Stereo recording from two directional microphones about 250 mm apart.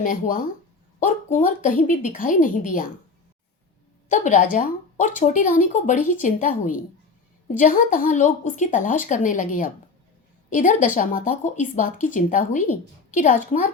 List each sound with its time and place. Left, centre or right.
0.0 s a woman's voice: left
4.1 s a woman's voice: left
10.5 s a woman's voice: left